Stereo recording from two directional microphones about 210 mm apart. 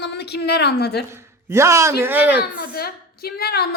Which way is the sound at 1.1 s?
15° right (ahead or behind).